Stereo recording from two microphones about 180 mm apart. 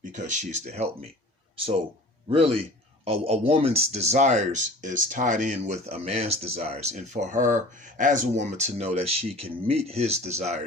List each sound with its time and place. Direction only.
0.1 s speech: 45° right (ahead or behind)
2.2 s speech: 35° right (ahead or behind)